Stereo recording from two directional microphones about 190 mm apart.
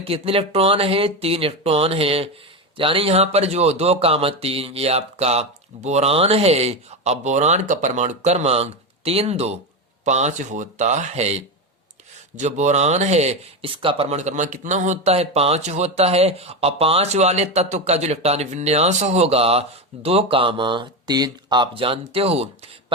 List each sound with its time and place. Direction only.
0.0 s speech: 30° right (ahead or behind)